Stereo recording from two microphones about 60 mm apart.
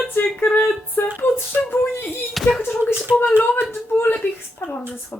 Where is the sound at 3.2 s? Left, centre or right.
Left.